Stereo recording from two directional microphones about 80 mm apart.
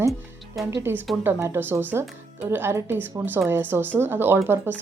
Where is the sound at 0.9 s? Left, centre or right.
Right.